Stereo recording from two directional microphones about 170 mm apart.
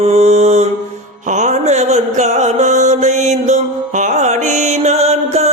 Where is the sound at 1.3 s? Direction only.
45° right (ahead or behind).